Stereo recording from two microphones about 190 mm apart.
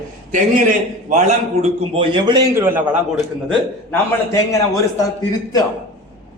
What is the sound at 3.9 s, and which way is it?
Speech, 15° left (ahead or behind).